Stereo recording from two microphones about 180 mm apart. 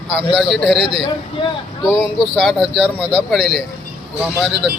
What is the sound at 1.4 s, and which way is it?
Speech, 15° left (ahead or behind).